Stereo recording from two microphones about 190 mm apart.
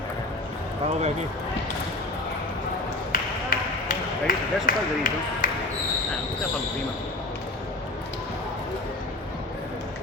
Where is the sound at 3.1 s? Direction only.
50° left (ahead or behind).